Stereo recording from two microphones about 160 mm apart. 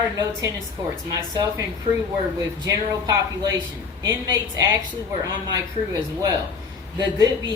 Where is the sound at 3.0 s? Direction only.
25° right (ahead or behind).